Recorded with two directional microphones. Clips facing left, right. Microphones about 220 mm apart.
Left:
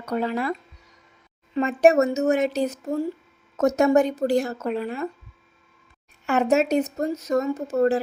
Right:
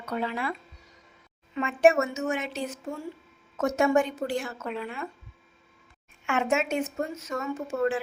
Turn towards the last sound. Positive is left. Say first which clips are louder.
# left 6 dB
turn(degrees=40)  # may be behind; listen again after turning